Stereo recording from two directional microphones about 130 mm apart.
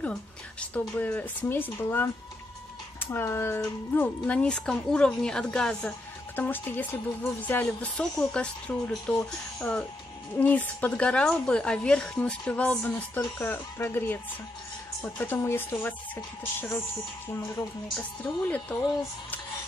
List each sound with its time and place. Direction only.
0.0 s speech: 10° left (ahead or behind)
17.3 s speech: 20° left (ahead or behind)